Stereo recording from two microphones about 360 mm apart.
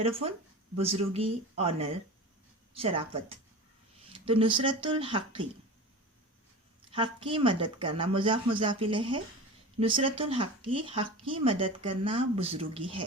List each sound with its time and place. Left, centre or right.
0.8 s speech: centre
6.9 s speech: centre